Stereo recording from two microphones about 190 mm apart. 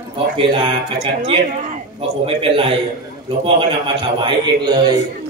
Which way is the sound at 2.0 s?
30° right (ahead or behind).